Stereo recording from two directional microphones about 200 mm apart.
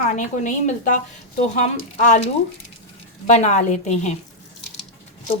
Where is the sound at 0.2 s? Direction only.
40° left (ahead or behind).